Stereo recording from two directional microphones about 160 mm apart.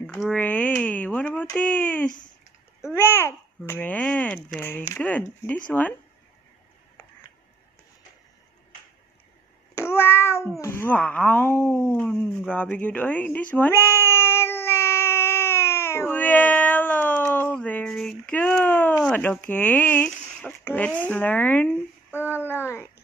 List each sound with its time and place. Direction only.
0.0 s speech: 5° left (ahead or behind)
2.0 s speech: 55° left (ahead or behind)
2.9 s speech: 15° left (ahead or behind)
9.8 s meow: 15° left (ahead or behind)
10.6 s a sound: 15° left (ahead or behind)
19.0 s speech: 10° left (ahead or behind)